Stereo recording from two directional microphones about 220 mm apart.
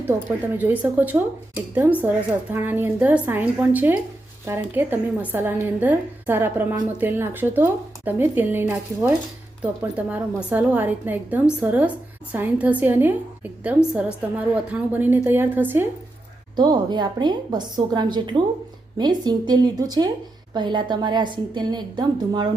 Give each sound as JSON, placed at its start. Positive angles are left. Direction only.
{"t": 0.5, "sound": "a woman's voice", "side_deg": -5}
{"t": 16.6, "sound": "a woman's voice", "side_deg": -20}